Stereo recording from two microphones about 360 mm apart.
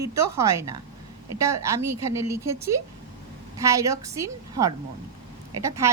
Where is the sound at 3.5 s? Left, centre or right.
Centre.